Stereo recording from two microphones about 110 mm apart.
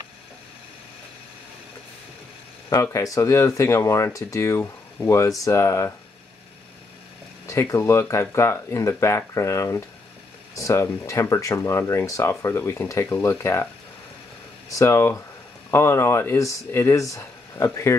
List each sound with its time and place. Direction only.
2.7 s speech: 30° left (ahead or behind)
7.4 s speech: 30° left (ahead or behind)
14.7 s speech: 25° left (ahead or behind)